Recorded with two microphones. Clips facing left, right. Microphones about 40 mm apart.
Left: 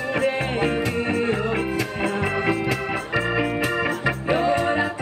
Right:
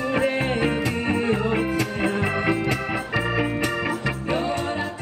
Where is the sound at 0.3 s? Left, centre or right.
Centre.